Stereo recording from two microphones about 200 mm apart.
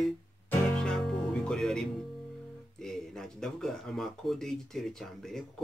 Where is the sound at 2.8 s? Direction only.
5° left (ahead or behind).